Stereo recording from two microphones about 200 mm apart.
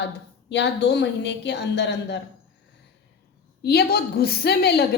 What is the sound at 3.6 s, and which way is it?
A woman's voice, 55° left (ahead or behind).